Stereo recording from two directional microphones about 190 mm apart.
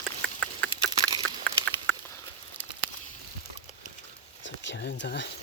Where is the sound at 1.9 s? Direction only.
10° left (ahead or behind).